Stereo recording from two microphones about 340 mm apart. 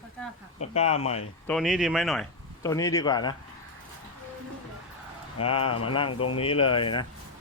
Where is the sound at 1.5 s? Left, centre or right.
Centre.